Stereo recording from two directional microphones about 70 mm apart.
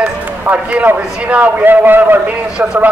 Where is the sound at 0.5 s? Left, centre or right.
Right.